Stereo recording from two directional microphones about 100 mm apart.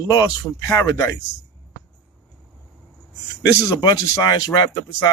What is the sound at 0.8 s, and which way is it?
Speech, 30° left (ahead or behind).